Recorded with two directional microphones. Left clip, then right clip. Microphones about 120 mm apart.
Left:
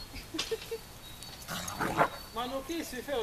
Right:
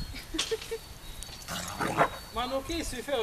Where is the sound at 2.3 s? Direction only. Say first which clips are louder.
Right 4 dB; 20° right (ahead or behind).